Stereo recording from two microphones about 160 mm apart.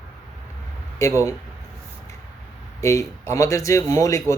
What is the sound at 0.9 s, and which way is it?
Speech, 20° left (ahead or behind).